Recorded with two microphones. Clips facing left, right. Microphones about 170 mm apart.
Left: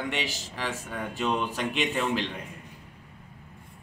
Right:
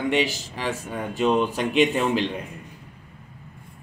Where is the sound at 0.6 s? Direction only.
15° right (ahead or behind).